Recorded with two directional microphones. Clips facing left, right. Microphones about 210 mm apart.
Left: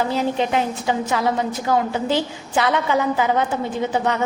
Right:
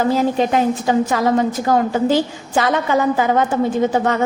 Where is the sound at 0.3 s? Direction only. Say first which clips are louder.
Right 5 dB; 45° right (ahead or behind).